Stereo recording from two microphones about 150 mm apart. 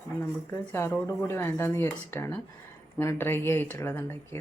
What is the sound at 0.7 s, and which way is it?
Speech, 15° left (ahead or behind).